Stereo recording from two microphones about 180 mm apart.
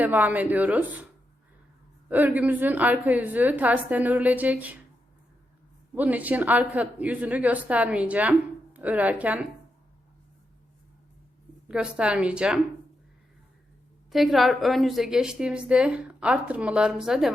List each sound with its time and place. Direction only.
0.0 s a woman's voice: 10° right (ahead or behind)
2.0 s a woman's voice: 10° right (ahead or behind)
5.9 s a woman's voice: 10° right (ahead or behind)
11.7 s a woman's voice: 5° right (ahead or behind)
14.1 s a woman's voice: centre (ahead or behind)